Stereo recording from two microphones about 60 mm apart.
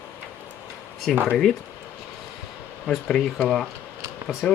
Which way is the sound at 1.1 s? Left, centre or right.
Centre.